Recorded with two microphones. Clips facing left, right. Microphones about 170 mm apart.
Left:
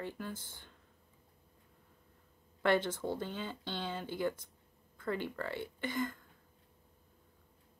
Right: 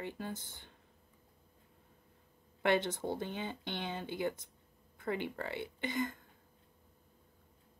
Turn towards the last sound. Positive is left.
turn(degrees=-20)  # may be behind; listen again after turning